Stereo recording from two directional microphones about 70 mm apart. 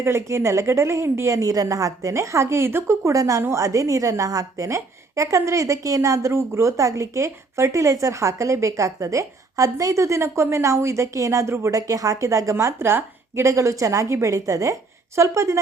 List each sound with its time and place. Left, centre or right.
0.0 s a woman's voice: right
11.7 s a woman's voice: right